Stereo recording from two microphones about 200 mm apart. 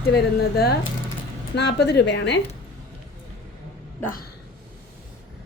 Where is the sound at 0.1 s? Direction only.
55° left (ahead or behind).